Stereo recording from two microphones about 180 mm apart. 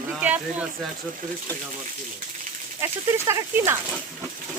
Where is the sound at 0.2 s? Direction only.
10° right (ahead or behind).